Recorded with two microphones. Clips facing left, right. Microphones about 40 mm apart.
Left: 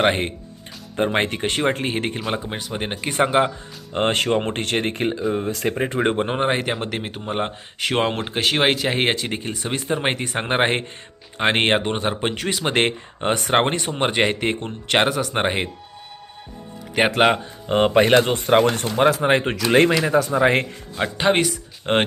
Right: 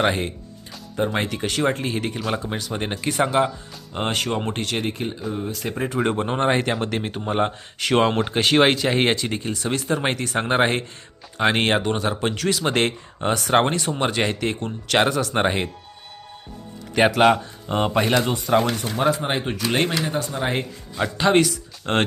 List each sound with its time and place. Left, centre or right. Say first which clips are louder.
0.1 s speech: left 2 dB; left
0.9 s speech: left 3 dB; left; by 3.1 s centre
3.1 s speech: left 2 dB; left
3.9 s speech: left 5 dB; left
5.7 s speech: even; left
17.2 s speech: right 1 dB; left
18.9 s speech: left 5 dB; left
20.9 s a man's voice: right 1 dB; left